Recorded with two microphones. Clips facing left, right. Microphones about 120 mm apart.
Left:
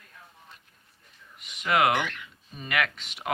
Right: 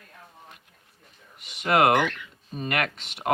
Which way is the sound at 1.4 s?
65° right (ahead or behind).